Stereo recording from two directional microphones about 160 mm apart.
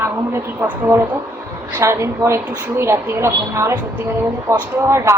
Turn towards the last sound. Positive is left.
turn(degrees=-15)  # may be behind; listen again after turning